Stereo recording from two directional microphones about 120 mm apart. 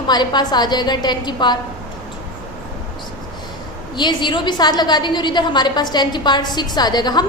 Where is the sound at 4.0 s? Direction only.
40° left (ahead or behind).